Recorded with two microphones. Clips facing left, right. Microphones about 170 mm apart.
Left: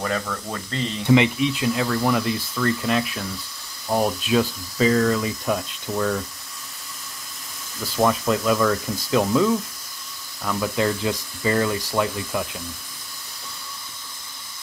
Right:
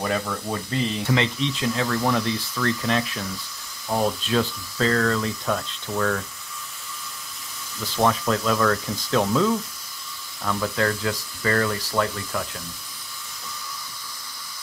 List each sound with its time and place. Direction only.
0.0 s speech: 10° right (ahead or behind)
1.0 s speech: 15° left (ahead or behind)
7.9 s speech: 5° left (ahead or behind)